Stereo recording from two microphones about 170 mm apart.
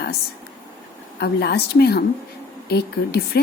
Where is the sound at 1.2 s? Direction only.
70° left (ahead or behind).